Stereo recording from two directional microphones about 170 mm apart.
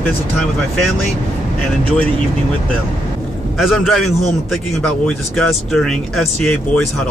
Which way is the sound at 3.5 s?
Centre (ahead or behind).